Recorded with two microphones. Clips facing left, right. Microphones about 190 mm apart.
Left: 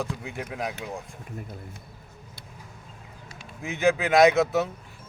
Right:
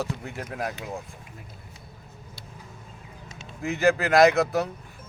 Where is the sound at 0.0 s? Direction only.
Centre (ahead or behind).